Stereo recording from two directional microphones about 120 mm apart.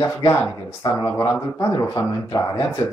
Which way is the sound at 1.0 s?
25° left (ahead or behind).